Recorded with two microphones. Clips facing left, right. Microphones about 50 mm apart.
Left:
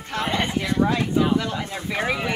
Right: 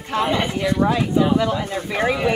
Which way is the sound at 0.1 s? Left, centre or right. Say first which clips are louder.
Right 4 dB; centre.